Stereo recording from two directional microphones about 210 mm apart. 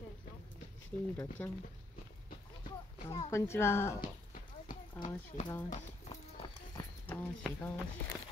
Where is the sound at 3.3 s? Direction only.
10° left (ahead or behind).